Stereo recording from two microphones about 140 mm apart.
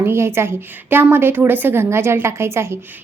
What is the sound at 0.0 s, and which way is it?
A woman's voice, 20° right (ahead or behind).